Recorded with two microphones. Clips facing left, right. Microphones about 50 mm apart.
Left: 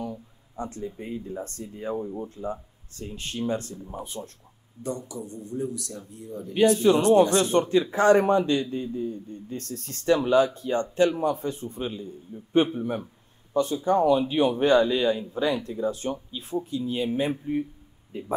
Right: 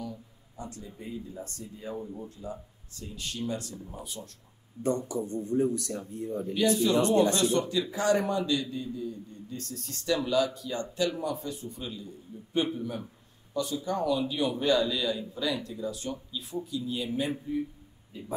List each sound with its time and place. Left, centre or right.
0.0 s a man's voice: left
4.8 s a man's voice: right
6.5 s a man's voice: left